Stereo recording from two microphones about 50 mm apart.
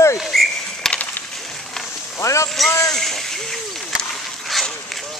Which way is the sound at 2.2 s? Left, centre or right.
Left.